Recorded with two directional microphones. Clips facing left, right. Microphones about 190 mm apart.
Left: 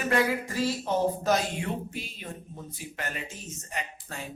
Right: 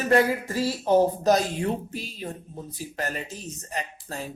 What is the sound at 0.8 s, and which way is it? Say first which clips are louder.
Speech: right 7 dB; 35° right (ahead or behind).